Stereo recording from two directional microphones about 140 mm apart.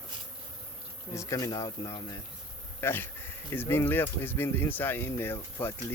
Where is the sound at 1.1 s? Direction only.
25° left (ahead or behind).